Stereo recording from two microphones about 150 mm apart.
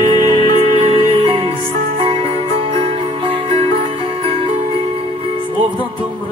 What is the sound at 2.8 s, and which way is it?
Music, 40° right (ahead or behind).